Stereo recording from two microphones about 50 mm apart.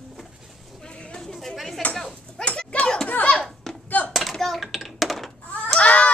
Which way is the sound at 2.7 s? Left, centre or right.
Centre.